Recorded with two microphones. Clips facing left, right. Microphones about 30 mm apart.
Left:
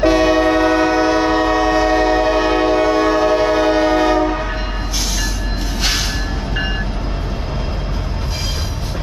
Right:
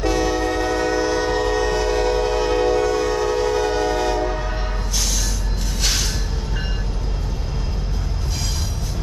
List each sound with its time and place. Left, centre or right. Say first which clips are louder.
0.0 s train: left 8 dB; left